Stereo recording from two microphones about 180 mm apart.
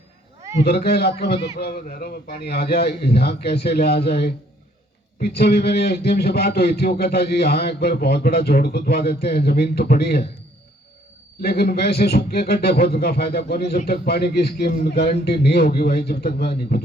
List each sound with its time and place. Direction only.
0.6 s a man's voice: 60° left (ahead or behind)
11.3 s a man's voice: 60° left (ahead or behind)